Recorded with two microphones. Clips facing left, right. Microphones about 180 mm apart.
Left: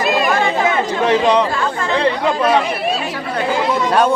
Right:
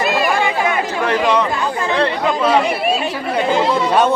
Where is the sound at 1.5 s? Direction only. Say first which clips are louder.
Even; 15° right (ahead or behind).